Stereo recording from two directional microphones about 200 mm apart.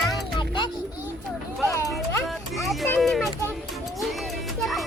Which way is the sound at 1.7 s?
15° left (ahead or behind).